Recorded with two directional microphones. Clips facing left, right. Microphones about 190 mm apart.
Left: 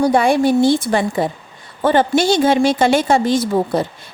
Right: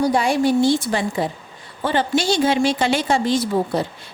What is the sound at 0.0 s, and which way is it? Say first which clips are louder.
A woman's voice: left 4 dB; 55° left (ahead or behind).